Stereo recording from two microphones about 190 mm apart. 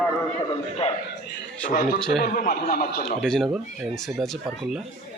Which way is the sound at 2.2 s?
45° left (ahead or behind).